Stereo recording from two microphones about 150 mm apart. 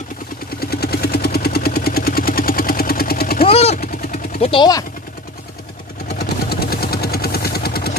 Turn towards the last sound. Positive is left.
turn(degrees=90)